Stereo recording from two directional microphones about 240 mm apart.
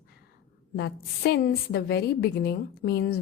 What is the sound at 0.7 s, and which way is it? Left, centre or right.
A woman's voice, left.